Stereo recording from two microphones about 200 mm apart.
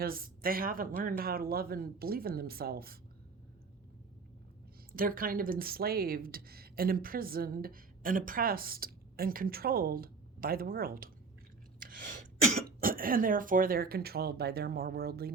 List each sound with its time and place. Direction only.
0.0 s speech: 45° right (ahead or behind)
4.9 s speech: 45° right (ahead or behind)
11.8 s a sound: 45° right (ahead or behind)
12.6 s speech: 45° right (ahead or behind)